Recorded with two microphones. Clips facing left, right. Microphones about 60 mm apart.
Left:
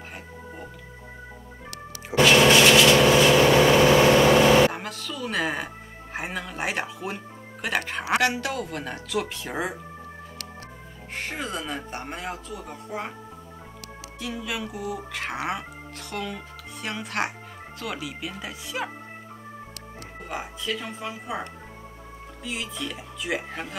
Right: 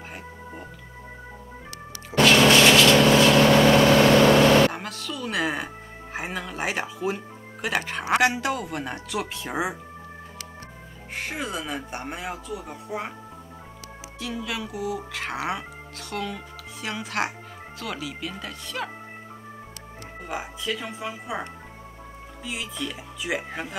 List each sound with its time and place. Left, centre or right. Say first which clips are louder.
2.1 s vehicle: even; centre
6.1 s music: even; centre
7.6 s speech: right 1 dB; centre
8.2 s speech: right 2 dB; centre
11.1 s speech: right 1 dB; centre
14.2 s speech: even; centre
20.2 s speech: right 1 dB; centre